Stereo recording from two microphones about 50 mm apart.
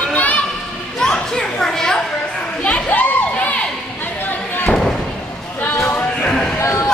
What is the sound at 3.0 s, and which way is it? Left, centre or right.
Crowd, left.